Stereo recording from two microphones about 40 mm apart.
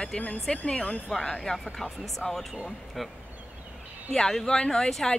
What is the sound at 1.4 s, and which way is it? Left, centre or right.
Speech, centre.